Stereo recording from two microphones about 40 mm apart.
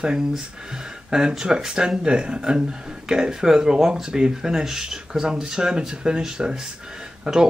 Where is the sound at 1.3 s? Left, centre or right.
Centre.